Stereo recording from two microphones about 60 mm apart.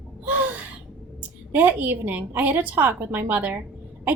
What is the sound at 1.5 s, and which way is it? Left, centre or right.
A woman's voice, right.